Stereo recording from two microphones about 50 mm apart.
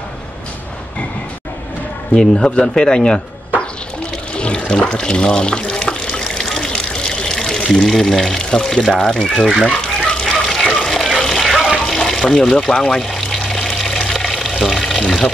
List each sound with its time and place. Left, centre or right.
2.1 s speech: centre
4.4 s water: left
7.8 s speech: centre
9.7 s water: centre
10.3 s water: centre
14.6 s pour: centre
15.0 s speech: centre